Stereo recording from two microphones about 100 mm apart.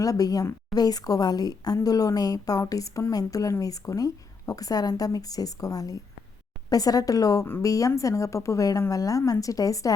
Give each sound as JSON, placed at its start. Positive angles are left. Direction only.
{"t": 0.0, "sound": "a woman's voice", "side_deg": 35}